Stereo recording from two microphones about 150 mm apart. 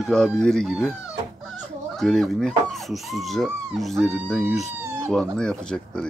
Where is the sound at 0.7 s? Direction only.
5° right (ahead or behind).